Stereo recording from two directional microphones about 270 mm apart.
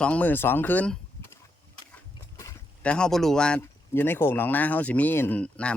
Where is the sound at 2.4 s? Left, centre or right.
Centre.